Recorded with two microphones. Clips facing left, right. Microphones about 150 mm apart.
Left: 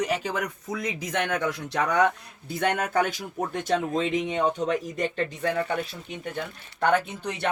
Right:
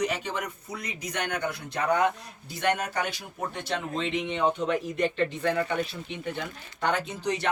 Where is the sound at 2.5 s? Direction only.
55° left (ahead or behind).